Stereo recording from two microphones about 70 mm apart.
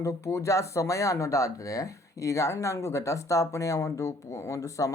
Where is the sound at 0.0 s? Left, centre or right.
Left.